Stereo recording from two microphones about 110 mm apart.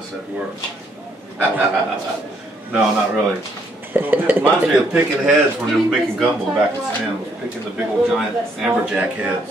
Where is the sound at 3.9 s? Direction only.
15° right (ahead or behind).